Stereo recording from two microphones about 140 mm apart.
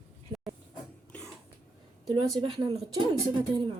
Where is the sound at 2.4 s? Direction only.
30° right (ahead or behind).